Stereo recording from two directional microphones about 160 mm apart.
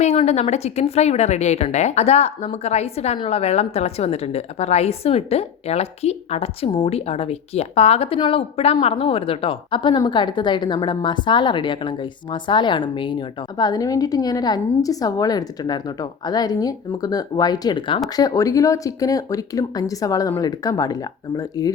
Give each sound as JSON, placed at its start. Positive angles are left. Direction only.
{"t": 0.0, "sound": "a woman's voice", "side_deg": 45}